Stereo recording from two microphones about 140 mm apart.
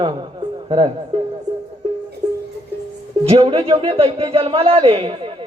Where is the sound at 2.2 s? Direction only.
30° right (ahead or behind).